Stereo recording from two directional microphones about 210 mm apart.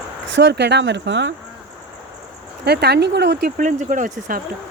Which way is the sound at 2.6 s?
50° right (ahead or behind).